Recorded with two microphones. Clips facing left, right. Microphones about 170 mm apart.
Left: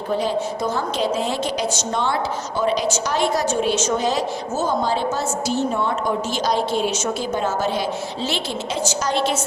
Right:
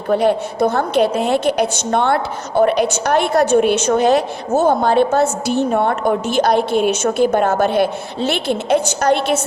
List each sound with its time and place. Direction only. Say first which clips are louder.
0.1 s a woman's voice: right 7 dB; 60° right (ahead or behind)